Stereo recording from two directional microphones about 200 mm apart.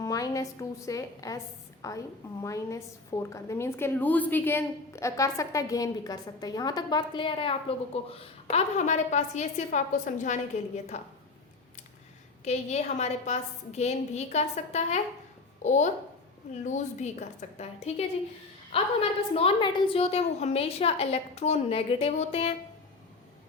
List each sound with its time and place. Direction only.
0.0 s a sound: 15° left (ahead or behind)
0.9 s a woman's voice: 15° left (ahead or behind); by 11.0 s 35° left (ahead or behind)
12.5 s a woman's voice: 35° left (ahead or behind)